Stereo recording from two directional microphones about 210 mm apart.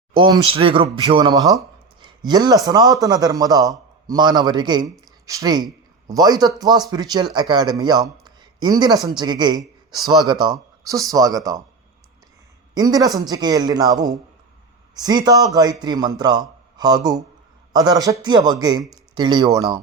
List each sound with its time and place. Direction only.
0.1 s a man's voice: 20° right (ahead or behind)
2.0 s a sound: 20° right (ahead or behind)
2.6 s a man's voice: 20° right (ahead or behind)
8.2 s a sound: 20° right (ahead or behind)
9.0 s a man's voice: 20° right (ahead or behind)
12.7 s a man's voice: 15° right (ahead or behind)